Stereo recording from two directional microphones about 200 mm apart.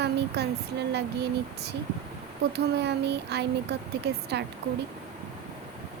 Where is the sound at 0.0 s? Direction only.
55° right (ahead or behind).